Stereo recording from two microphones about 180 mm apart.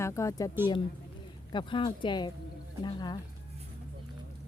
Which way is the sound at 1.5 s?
25° left (ahead or behind).